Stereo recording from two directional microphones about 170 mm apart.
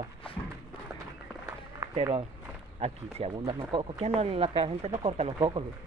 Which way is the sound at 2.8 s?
35° right (ahead or behind).